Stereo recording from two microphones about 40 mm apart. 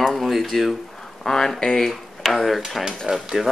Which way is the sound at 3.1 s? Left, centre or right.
Right.